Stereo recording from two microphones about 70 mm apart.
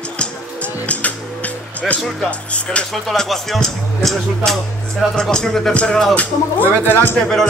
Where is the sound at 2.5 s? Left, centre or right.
Centre.